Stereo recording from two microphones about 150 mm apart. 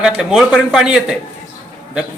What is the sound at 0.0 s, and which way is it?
Speech, 5° right (ahead or behind).